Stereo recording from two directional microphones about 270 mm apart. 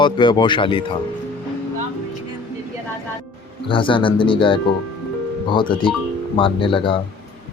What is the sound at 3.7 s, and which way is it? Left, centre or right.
Speech, centre.